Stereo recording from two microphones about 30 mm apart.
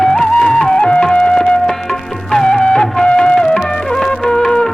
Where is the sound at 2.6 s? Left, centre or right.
Left.